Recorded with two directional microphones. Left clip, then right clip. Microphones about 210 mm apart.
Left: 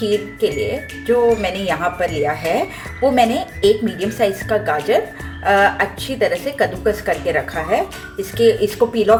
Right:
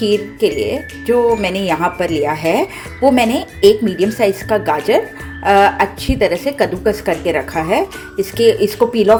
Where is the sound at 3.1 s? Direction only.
30° right (ahead or behind).